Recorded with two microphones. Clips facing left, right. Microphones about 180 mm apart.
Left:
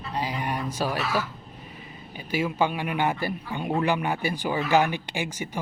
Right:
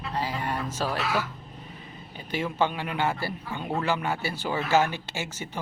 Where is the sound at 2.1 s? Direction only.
10° left (ahead or behind).